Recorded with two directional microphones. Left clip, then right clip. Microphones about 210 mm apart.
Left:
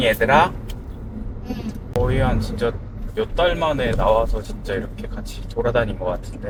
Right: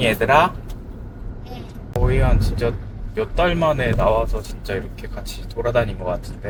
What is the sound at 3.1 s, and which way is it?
Speech, centre (ahead or behind).